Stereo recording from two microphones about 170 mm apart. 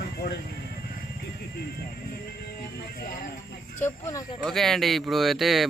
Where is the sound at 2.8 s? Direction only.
60° left (ahead or behind).